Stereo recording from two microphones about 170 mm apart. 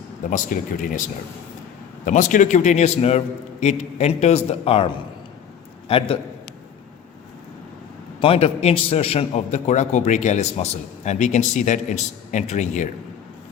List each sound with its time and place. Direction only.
0.3 s a man's voice: 50° left (ahead or behind)
2.0 s a man's voice: 50° left (ahead or behind)
5.9 s a man's voice: 35° left (ahead or behind)
8.2 s a man's voice: 35° left (ahead or behind)